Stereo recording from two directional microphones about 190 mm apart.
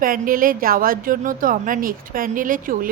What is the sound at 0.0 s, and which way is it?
A woman's voice, 45° right (ahead or behind).